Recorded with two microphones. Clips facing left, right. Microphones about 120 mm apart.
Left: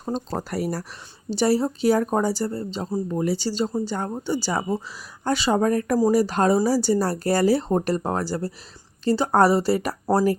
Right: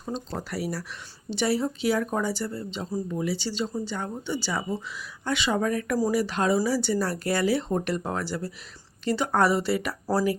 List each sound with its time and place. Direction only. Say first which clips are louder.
0.0 s speech: left 5 dB; 45° left (ahead or behind)